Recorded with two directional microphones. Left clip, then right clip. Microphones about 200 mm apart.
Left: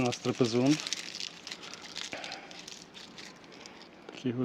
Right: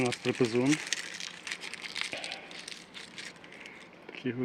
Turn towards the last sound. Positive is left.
turn(degrees=35)  # may be behind; listen again after turning